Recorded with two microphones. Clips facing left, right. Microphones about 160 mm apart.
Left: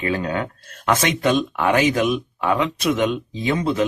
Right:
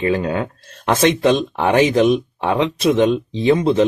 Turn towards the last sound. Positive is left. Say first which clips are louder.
# right 6 dB
turn(degrees=-30)  # may be behind; listen again after turning